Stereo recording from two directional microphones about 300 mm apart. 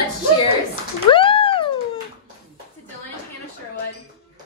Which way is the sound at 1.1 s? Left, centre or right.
Centre.